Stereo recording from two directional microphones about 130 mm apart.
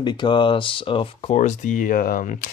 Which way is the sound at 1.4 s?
75° left (ahead or behind).